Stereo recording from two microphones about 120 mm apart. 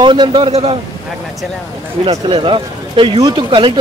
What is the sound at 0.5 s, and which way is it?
Speech, 55° right (ahead or behind).